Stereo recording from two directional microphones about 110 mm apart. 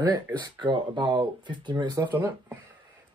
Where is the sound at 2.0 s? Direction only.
15° right (ahead or behind).